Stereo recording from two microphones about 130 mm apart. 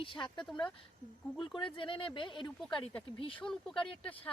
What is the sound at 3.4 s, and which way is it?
Speech, 5° left (ahead or behind).